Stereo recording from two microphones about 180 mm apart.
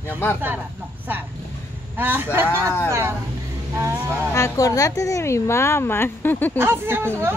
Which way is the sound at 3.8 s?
15° right (ahead or behind).